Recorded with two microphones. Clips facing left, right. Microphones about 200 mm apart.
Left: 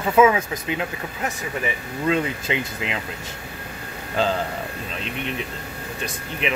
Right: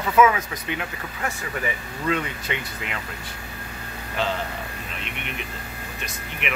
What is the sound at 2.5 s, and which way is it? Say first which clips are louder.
Speech: left 5 dB; 30° left (ahead or behind).